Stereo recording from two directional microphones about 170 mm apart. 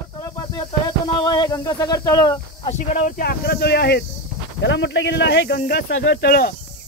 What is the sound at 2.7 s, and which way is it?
Speech, 45° left (ahead or behind).